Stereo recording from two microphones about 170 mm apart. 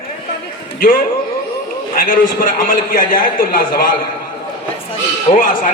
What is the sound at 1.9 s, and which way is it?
A man's voice, 55° left (ahead or behind).